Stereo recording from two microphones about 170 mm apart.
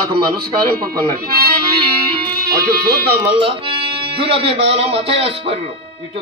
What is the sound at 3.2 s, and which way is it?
Speech, 30° right (ahead or behind).